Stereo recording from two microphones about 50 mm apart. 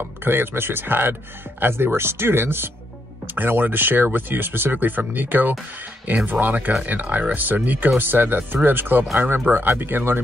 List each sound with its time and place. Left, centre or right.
0.2 s speech: right